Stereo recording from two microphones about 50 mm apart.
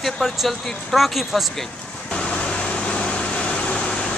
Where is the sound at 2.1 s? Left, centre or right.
Left.